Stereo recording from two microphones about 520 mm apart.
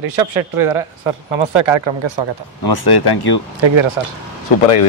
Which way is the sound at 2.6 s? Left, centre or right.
Left.